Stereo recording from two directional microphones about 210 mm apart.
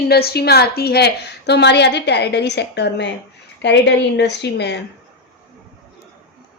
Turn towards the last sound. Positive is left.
turn(degrees=55)  # may be behind; listen again after turning